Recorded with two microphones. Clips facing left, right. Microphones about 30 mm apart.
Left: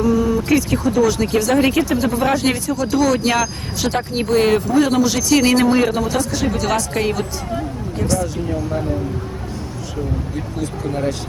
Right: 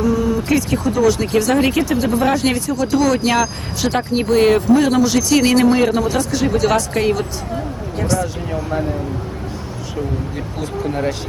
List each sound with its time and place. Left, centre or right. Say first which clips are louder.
0.0 s speech: left 1 dB; centre
10.6 s speech: right 2 dB; right